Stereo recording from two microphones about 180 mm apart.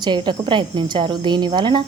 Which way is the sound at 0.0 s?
25° right (ahead or behind).